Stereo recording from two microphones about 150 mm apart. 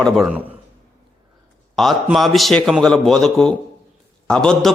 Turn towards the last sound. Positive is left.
turn(degrees=5)  # may be behind; listen again after turning